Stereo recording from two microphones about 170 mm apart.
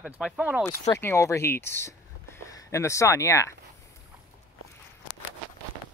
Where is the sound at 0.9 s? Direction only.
15° left (ahead or behind).